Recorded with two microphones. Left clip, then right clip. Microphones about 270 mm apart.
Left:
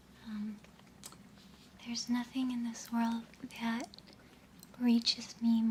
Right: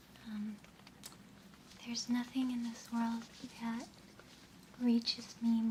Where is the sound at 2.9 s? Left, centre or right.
Centre.